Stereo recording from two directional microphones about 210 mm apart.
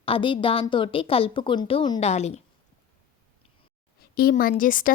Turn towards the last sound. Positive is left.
turn(degrees=40)  # may be behind; listen again after turning